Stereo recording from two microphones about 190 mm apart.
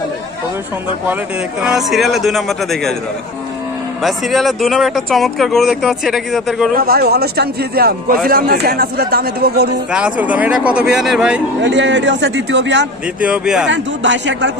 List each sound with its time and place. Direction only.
1.6 s speech: centre (ahead or behind)
4.0 s speech: centre (ahead or behind)
6.7 s a man's voice: 50° right (ahead or behind)
9.9 s speech: 5° right (ahead or behind)
11.6 s a man's voice: 70° right (ahead or behind)
13.2 s speech: 5° right (ahead or behind)
13.7 s a man's voice: 70° right (ahead or behind)